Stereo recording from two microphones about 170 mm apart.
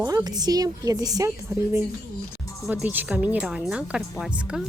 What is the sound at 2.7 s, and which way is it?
A woman's voice, 10° right (ahead or behind).